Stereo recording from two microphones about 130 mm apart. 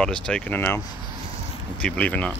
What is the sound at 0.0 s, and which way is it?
Speech, 5° left (ahead or behind).